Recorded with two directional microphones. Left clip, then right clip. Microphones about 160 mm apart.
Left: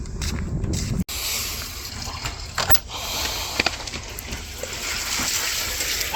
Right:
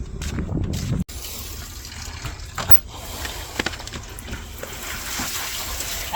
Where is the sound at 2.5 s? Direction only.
80° right.